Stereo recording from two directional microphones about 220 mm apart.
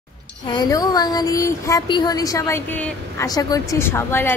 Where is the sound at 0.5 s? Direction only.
20° left (ahead or behind).